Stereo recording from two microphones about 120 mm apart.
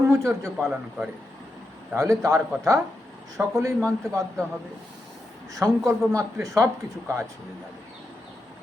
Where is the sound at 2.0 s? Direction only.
25° right (ahead or behind).